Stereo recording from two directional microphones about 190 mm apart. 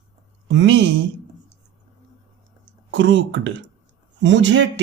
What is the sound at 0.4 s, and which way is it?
Speech, 70° right (ahead or behind).